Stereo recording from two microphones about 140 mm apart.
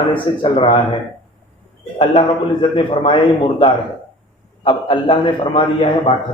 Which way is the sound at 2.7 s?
35° left (ahead or behind).